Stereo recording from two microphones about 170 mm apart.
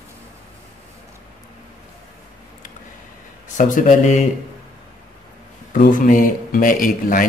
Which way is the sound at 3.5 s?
50° left (ahead or behind).